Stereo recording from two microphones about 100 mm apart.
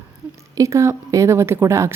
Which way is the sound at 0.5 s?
30° right (ahead or behind).